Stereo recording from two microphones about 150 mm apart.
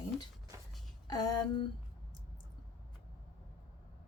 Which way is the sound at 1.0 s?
25° left (ahead or behind).